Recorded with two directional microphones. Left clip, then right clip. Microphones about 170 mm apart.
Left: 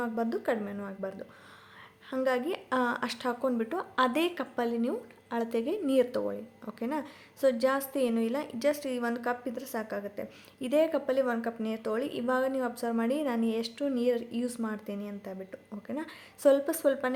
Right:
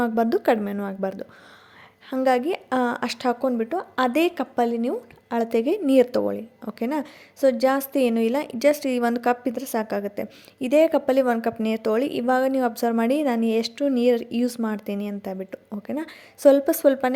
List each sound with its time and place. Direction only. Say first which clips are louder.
0.0 s a woman's voice: right 10 dB; 45° right (ahead or behind)